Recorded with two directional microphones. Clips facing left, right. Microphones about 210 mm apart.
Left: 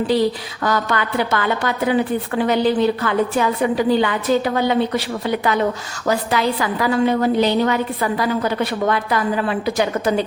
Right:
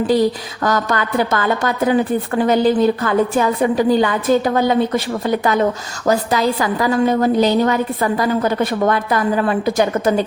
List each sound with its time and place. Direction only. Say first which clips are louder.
0.1 s a woman's voice: right 2 dB; 45° right (ahead or behind)